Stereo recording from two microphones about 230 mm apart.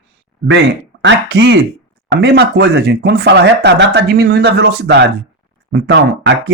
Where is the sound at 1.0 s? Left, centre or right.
Right.